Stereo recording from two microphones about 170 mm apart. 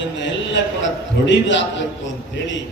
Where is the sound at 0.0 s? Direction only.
90° left.